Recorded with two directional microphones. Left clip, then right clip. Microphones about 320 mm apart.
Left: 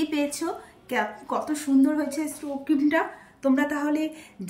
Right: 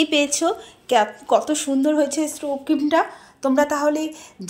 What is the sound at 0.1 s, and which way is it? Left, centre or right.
Speech, centre.